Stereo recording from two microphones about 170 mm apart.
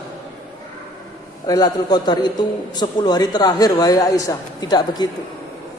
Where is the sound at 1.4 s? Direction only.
25° left (ahead or behind).